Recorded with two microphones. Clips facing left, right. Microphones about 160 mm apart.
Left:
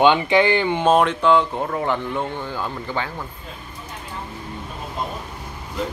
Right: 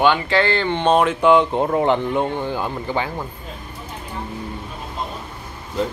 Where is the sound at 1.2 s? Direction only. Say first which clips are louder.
Right 3 dB; 20° right (ahead or behind).